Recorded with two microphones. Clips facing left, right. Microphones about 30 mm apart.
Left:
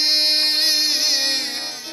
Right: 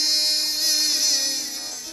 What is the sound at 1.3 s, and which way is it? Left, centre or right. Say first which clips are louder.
Music: left 6 dB; left.